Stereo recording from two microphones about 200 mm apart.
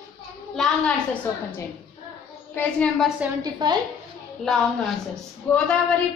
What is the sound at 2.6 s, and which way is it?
Speech, 5° left (ahead or behind).